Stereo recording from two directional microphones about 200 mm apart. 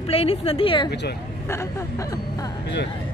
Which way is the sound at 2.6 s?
60° left (ahead or behind).